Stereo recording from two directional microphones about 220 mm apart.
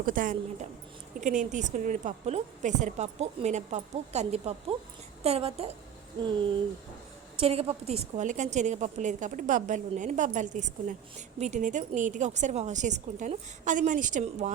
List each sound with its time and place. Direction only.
0.0 s a woman's voice: 35° right (ahead or behind)
7.3 s a woman's voice: 25° right (ahead or behind)